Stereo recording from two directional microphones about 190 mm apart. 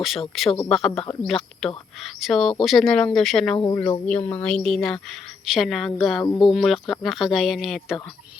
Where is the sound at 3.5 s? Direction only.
20° left (ahead or behind).